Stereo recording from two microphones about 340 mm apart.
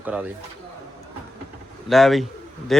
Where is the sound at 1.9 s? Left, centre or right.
Centre.